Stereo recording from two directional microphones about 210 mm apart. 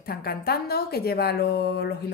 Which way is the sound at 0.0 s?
45° left (ahead or behind).